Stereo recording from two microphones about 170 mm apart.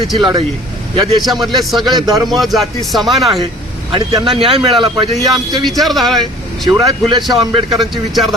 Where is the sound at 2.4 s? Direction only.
Centre (ahead or behind).